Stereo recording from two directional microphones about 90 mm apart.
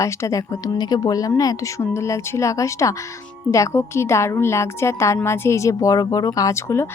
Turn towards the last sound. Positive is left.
turn(degrees=30)  # may be behind; listen again after turning